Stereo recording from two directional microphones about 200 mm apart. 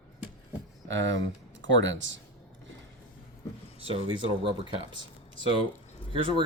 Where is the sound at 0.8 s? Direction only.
65° right (ahead or behind).